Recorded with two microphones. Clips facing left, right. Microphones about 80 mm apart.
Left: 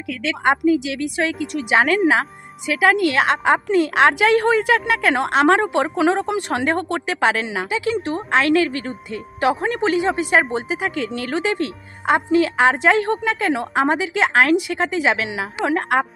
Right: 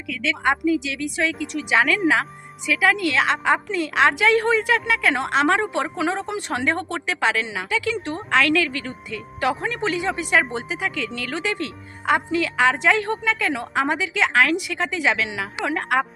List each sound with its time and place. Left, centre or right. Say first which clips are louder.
0.1 s a woman's voice: left 3 dB; left
8.7 s speech: left 4 dB; left
9.0 s speech: left 4 dB; left
10.0 s a woman's voice: left 3 dB; left